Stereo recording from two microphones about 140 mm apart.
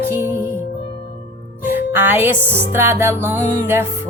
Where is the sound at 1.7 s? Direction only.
15° right (ahead or behind).